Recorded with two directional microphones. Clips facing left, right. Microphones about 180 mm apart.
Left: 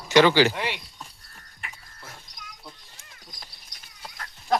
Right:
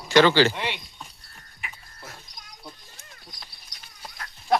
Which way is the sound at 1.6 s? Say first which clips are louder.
Right 2 dB; 5° right (ahead or behind).